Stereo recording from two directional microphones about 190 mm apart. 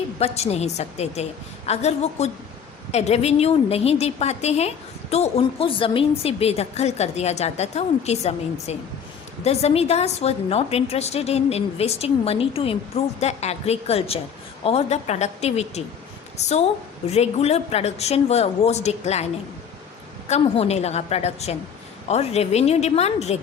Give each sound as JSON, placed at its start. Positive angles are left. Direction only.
{"t": 0.2, "sound": "a woman's voice", "side_deg": 35}